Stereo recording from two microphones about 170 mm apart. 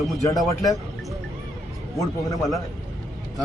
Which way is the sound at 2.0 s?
20° left (ahead or behind).